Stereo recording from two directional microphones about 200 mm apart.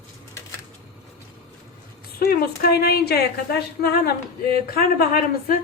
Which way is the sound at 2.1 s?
50° left (ahead or behind).